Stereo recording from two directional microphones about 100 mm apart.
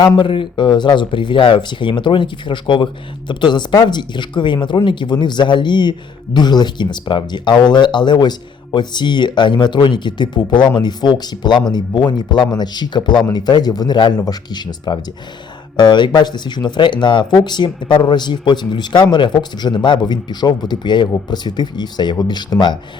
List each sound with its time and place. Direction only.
0.2 s speech: 55° left (ahead or behind)